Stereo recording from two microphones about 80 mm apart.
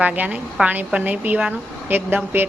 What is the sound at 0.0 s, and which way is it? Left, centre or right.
A woman's voice, centre.